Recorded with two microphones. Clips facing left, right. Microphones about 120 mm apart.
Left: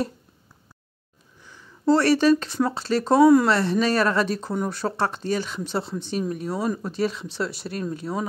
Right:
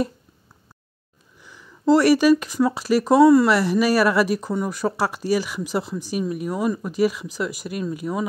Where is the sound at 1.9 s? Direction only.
10° right (ahead or behind).